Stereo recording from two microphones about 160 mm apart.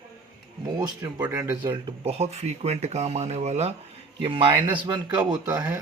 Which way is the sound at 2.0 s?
40° right (ahead or behind).